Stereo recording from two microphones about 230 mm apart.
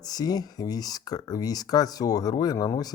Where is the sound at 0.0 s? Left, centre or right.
Centre.